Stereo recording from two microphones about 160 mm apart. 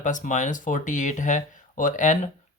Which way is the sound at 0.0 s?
50° left (ahead or behind).